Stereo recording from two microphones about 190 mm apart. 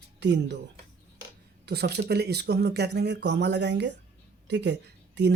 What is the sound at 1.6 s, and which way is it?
Speech, 60° right (ahead or behind).